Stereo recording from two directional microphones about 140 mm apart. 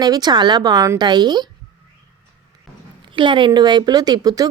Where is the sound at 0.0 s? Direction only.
30° right (ahead or behind).